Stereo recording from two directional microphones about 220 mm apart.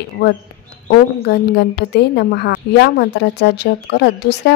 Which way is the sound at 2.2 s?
50° left (ahead or behind).